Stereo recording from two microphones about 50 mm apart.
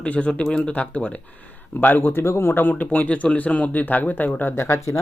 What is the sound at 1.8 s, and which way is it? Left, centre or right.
Speech, left.